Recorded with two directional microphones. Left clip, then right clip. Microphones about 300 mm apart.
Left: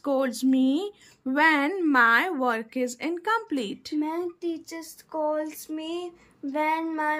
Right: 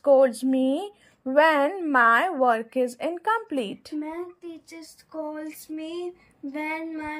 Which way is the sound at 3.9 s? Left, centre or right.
Centre.